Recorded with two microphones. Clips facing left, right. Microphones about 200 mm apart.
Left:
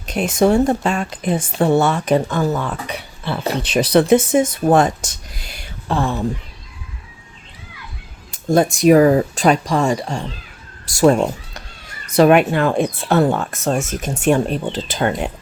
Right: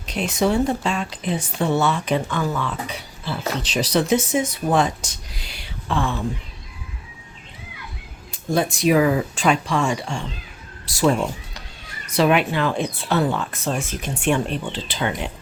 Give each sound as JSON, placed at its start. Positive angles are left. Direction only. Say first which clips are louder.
{"t": 0.0, "sound": "speech", "louder": "left 5 dB", "side_deg": 50}
{"t": 2.8, "sound": "speech", "louder": "left 4 dB", "side_deg": 60}
{"t": 8.3, "sound": "speech", "louder": "left 6 dB", "side_deg": 45}